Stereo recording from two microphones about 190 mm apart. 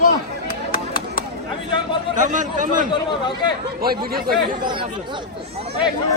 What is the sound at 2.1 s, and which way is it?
Speech, 40° right (ahead or behind).